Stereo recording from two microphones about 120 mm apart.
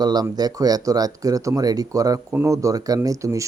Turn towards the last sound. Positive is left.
turn(degrees=-25)  # may be behind; listen again after turning